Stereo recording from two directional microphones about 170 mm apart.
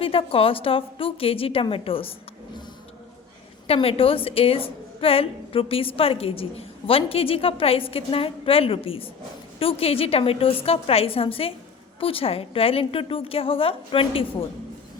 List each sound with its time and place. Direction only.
0.0 s a woman's voice: 35° left (ahead or behind)
3.7 s a woman's voice: 35° left (ahead or behind)